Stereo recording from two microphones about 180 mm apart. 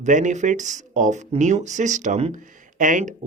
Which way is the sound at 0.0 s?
45° right (ahead or behind).